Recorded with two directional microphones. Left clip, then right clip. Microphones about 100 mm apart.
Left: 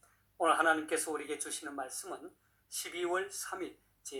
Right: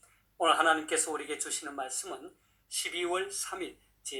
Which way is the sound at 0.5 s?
Centre (ahead or behind).